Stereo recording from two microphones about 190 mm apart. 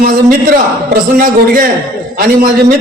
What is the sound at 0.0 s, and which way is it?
A man's voice, 50° right (ahead or behind).